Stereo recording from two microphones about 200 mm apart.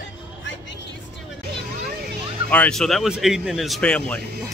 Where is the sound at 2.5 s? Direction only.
5° left (ahead or behind).